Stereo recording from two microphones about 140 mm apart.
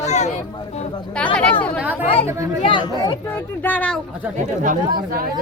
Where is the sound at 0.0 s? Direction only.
55° left (ahead or behind).